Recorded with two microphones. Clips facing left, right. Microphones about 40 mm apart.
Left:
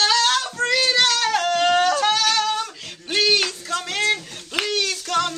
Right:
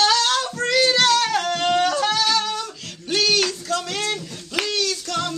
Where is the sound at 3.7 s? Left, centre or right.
Left.